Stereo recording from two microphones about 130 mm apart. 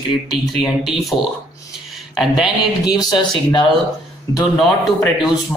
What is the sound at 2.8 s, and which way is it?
Speech, 30° left (ahead or behind).